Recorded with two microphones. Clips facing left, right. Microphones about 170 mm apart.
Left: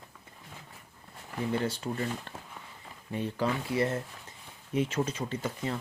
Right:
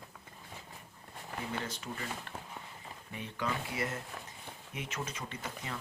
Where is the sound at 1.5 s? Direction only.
35° left (ahead or behind).